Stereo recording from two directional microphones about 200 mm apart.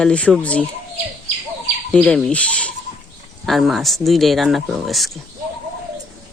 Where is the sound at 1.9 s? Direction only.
5° left (ahead or behind).